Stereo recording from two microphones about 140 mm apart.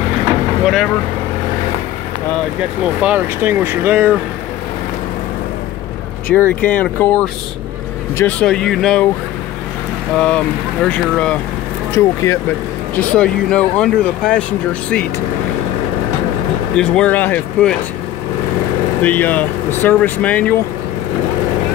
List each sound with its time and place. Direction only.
3.0 s speech: 15° right (ahead or behind)
6.6 s speech: 10° left (ahead or behind)
10.1 s speech: 5° left (ahead or behind)
11.9 s speech: 20° left (ahead or behind)
12.9 s speech: 10° left (ahead or behind)
16.7 s speech: 5° left (ahead or behind)
18.9 s speech: 10° left (ahead or behind)